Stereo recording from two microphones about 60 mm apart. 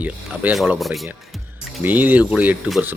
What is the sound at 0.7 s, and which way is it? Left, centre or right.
Speech, centre.